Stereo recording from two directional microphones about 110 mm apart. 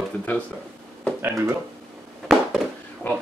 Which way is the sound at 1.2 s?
25° right (ahead or behind).